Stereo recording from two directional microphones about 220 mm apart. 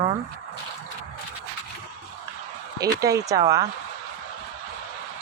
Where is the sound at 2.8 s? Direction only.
15° right (ahead or behind).